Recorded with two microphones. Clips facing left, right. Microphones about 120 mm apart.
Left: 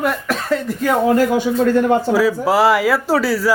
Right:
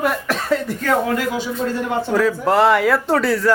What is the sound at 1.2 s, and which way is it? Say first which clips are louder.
Speech: left 7 dB; 50° left (ahead or behind).